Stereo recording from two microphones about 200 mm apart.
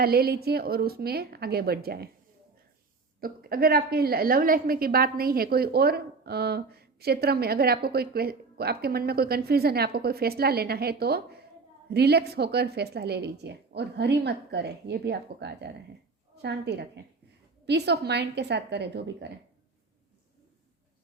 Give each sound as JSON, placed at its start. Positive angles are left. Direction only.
{"t": 0.0, "sound": "a woman's voice", "side_deg": -50}
{"t": 3.2, "sound": "a woman's voice", "side_deg": -45}